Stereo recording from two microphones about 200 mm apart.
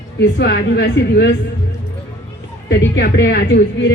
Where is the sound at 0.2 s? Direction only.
60° left (ahead or behind).